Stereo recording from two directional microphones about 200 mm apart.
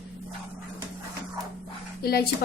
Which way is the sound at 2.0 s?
50° left (ahead or behind).